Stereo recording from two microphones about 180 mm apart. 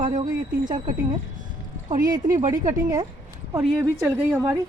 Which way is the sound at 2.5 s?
20° right (ahead or behind).